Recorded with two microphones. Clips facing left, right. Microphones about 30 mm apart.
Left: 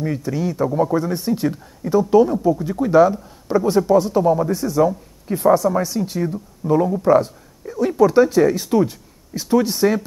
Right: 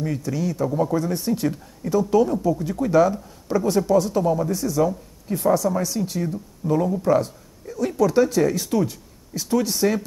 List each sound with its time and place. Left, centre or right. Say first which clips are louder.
0.0 s speech: left 3 dB; centre
4.8 s speech: left 4 dB; centre
5.5 s speech: left 5 dB; centre